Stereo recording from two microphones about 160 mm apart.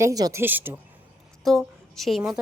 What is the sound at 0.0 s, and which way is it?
Speech, 20° right (ahead or behind).